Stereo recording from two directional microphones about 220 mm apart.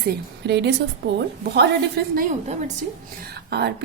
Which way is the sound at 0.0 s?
50° right (ahead or behind).